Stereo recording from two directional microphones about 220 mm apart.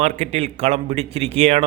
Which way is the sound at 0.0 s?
30° right (ahead or behind).